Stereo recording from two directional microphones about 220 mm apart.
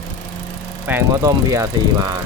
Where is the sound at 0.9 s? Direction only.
10° right (ahead or behind).